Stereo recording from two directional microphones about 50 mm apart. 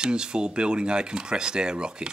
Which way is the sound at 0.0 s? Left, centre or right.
Centre.